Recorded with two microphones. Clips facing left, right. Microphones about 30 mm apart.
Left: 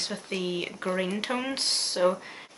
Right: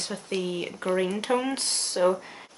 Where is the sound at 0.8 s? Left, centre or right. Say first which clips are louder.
Right 5 dB; centre.